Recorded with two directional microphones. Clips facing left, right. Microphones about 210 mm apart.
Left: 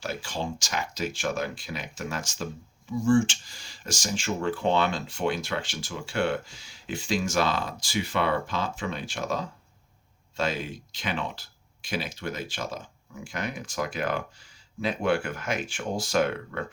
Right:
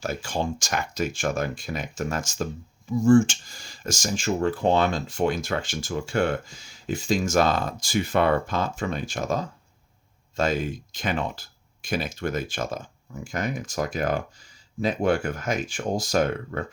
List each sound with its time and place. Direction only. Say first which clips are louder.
0.0 s speech: right 4 dB; 45° right (ahead or behind)